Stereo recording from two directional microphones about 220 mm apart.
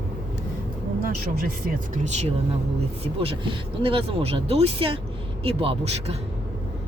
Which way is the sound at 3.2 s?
25° right (ahead or behind).